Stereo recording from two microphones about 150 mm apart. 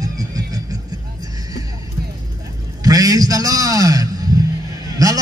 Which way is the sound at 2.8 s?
25° right (ahead or behind).